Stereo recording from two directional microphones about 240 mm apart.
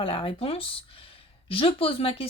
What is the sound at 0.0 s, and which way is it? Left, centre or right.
Speech, left.